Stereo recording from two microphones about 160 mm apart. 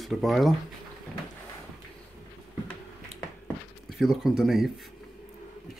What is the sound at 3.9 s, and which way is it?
Speech, centre (ahead or behind).